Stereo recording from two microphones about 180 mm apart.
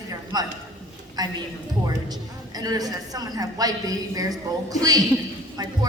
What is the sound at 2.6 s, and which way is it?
A woman's voice, 20° right (ahead or behind).